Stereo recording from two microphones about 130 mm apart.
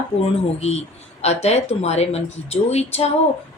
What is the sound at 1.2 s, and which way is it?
A woman's voice, 55° left (ahead or behind).